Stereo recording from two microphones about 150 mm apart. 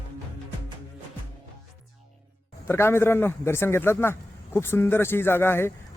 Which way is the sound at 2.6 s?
15° left (ahead or behind).